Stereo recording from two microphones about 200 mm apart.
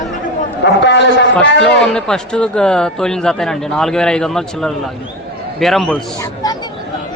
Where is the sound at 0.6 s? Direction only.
60° left (ahead or behind).